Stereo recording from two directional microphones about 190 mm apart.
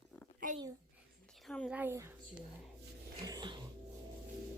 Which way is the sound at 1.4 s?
5° left (ahead or behind).